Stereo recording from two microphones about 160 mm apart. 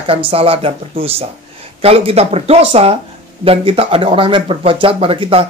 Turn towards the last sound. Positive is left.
turn(degrees=-35)  # may be behind; listen again after turning